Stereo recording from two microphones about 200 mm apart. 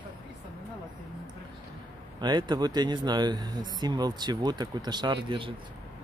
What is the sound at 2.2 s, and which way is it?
Speech, 20° right (ahead or behind).